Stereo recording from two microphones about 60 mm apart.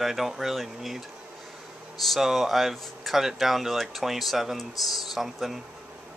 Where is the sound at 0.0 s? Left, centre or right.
Centre.